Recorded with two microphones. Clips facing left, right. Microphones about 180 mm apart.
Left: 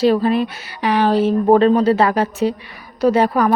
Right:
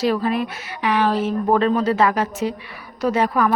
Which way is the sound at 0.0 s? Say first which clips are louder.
Left 5 dB; 30° left (ahead or behind).